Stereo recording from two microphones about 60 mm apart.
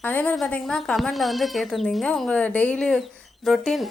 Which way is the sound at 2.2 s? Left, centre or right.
Left.